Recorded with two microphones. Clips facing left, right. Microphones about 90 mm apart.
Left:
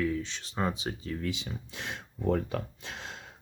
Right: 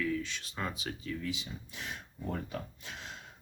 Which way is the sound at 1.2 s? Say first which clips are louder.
Left 4 dB; 85° left.